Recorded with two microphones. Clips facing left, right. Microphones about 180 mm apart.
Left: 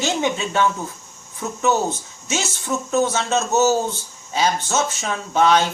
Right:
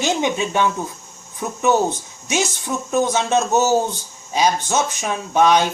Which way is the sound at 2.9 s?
15° right (ahead or behind).